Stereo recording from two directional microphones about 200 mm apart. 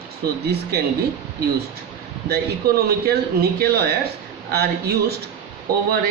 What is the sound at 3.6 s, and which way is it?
Speech, 50° right (ahead or behind).